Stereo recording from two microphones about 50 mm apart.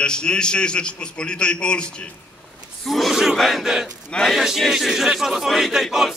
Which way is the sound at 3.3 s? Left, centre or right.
Centre.